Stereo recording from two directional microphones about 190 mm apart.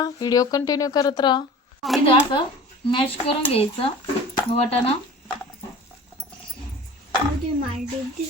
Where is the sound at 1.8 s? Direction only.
Centre (ahead or behind).